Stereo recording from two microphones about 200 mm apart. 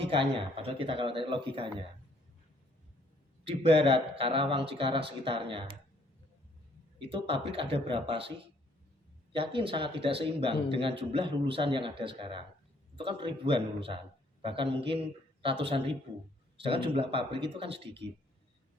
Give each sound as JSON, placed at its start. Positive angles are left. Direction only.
{"t": 0.1, "sound": "speech", "side_deg": -25}
{"t": 3.4, "sound": "speech", "side_deg": -30}
{"t": 7.0, "sound": "speech", "side_deg": -30}
{"t": 9.3, "sound": "a man's voice", "side_deg": -25}